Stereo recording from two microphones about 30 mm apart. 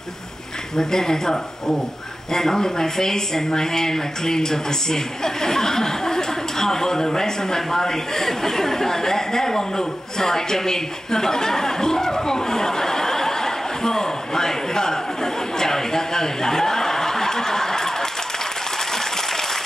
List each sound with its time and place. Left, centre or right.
0.7 s speech: centre